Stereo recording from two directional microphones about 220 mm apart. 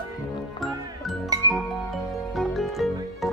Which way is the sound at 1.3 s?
15° right (ahead or behind).